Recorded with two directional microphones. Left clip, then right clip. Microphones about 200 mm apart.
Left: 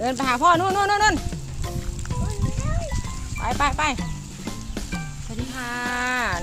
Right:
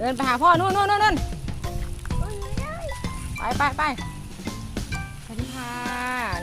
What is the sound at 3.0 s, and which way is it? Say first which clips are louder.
Music: right 1 dB; centre (ahead or behind).